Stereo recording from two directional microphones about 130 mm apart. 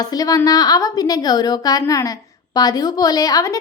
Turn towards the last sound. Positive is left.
turn(degrees=30)  # may be behind; listen again after turning